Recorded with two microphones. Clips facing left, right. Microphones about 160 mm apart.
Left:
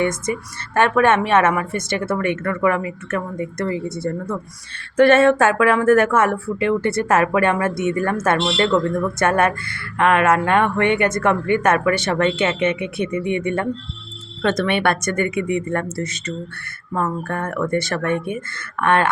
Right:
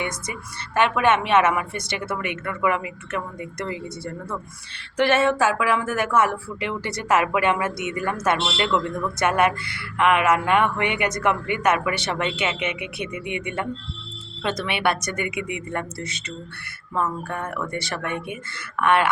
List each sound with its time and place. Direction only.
0.0 s a woman's voice: 50° left (ahead or behind)
4.9 s a woman's voice: 55° left (ahead or behind)
12.5 s speech: 10° right (ahead or behind)
13.3 s a woman's voice: 50° left (ahead or behind)